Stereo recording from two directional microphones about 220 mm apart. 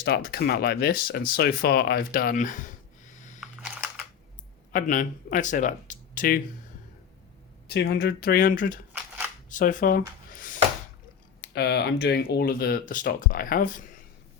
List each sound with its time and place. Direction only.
0.0 s speech: 45° left (ahead or behind)
3.2 s a sound: 35° left (ahead or behind)
3.4 s computer keyboard: centre (ahead or behind)
4.7 s speech: 35° left (ahead or behind)
7.7 s speech: 50° left (ahead or behind)
11.3 s speech: 50° left (ahead or behind)